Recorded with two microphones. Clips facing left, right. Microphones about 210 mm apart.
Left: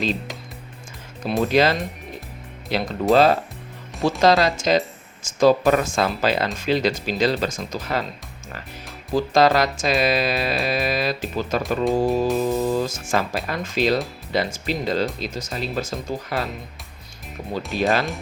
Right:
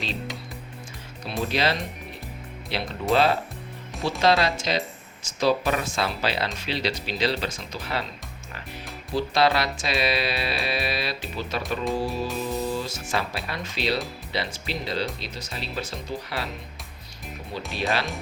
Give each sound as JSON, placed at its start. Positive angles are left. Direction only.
{"t": 1.2, "sound": "speech", "side_deg": 50}
{"t": 9.1, "sound": "speech", "side_deg": 45}
{"t": 17.7, "sound": "speech", "side_deg": 45}